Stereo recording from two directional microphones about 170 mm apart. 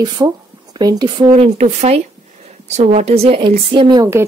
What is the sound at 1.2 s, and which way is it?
A woman's voice, 40° right (ahead or behind).